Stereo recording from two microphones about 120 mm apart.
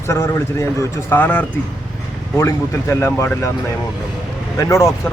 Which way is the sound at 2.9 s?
20° left (ahead or behind).